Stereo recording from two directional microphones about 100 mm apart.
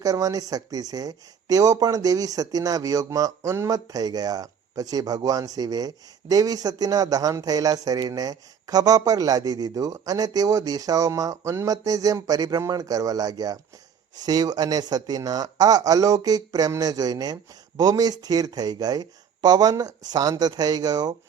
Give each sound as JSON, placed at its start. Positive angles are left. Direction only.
{"t": 0.0, "sound": "speech", "side_deg": -35}